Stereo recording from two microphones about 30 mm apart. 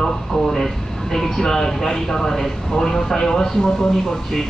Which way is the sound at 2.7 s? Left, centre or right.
Centre.